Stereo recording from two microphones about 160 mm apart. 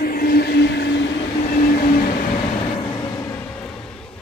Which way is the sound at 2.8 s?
25° left (ahead or behind).